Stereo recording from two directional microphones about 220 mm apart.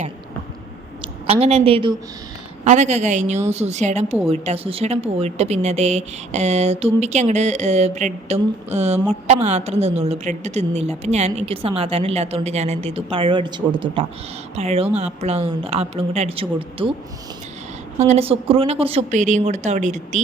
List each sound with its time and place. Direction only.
1.3 s a woman's voice: 25° right (ahead or behind)
17.9 s a woman's voice: 30° right (ahead or behind)